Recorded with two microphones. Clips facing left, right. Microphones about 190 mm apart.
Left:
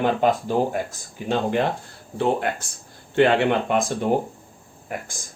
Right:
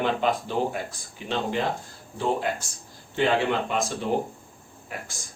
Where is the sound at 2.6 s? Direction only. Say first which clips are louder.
Left 1 dB; 55° left (ahead or behind).